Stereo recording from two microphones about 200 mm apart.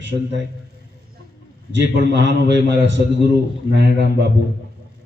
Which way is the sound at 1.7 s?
60° right (ahead or behind).